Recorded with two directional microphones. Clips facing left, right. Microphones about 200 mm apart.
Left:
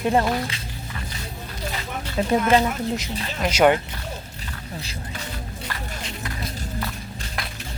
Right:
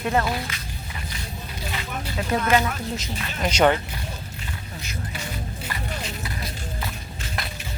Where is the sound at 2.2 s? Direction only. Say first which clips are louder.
Left 6 dB; 40° left (ahead or behind).